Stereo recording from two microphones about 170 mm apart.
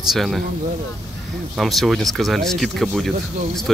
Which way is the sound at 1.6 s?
Centre (ahead or behind).